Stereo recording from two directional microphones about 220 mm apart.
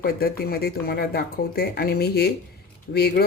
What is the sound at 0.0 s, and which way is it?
Speech, 45° left (ahead or behind).